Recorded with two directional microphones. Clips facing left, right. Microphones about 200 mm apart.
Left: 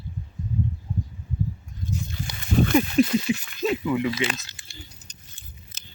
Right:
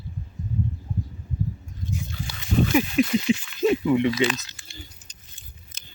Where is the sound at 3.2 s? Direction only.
20° right (ahead or behind).